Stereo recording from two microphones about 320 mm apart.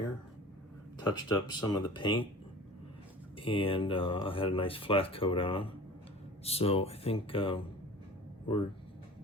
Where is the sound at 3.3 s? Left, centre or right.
Centre.